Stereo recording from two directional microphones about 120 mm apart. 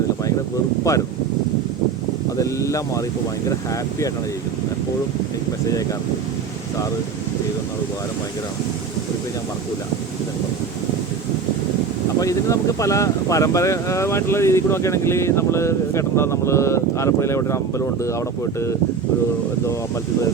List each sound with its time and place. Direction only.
0.9 s speech: 25° left (ahead or behind)
2.4 s speech: 25° left (ahead or behind)
12.2 s speech: 25° left (ahead or behind)